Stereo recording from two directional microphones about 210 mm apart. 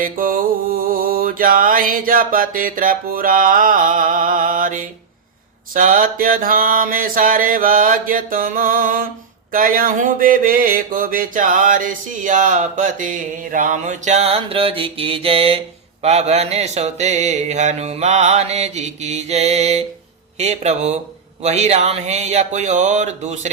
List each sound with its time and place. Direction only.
0.0 s mantra: 40° right (ahead or behind)